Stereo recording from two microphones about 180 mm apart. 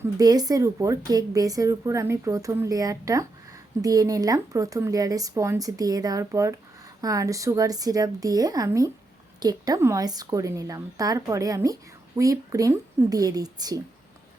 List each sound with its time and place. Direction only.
0.0 s a woman's voice: 20° right (ahead or behind)